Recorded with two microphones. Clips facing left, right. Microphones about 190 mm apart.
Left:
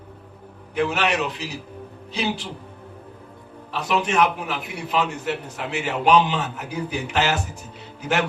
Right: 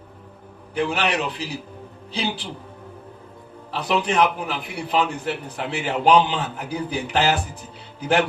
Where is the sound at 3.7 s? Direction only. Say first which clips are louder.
Right 1 dB; 35° right (ahead or behind).